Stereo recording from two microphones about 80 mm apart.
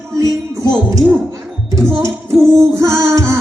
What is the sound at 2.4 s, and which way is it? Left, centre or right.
Music, right.